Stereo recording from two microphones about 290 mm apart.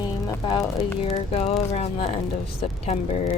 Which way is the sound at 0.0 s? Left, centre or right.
Centre.